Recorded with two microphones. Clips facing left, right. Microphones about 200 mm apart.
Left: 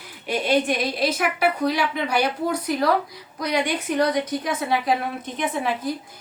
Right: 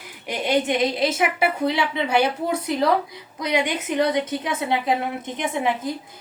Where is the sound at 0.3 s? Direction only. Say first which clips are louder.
Left 1 dB; 20° right (ahead or behind).